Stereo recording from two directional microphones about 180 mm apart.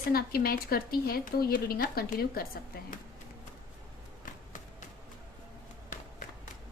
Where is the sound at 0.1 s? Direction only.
55° left (ahead or behind).